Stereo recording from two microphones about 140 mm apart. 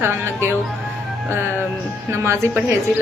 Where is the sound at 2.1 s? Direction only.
20° right (ahead or behind).